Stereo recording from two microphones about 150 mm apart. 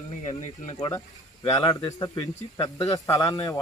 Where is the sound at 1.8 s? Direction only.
25° left (ahead or behind).